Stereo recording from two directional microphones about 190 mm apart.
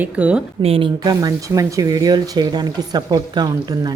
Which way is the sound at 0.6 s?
30° right (ahead or behind).